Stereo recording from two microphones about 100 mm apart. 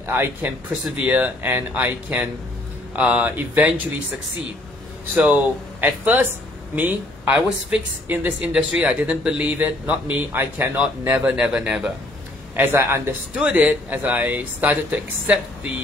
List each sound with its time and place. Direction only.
0.0 s a man's voice: 25° right (ahead or behind)
5.1 s speech: 15° right (ahead or behind)
10.8 s speech: 10° right (ahead or behind)
12.5 s a man's voice: 25° right (ahead or behind)
13.3 s speech: 10° right (ahead or behind)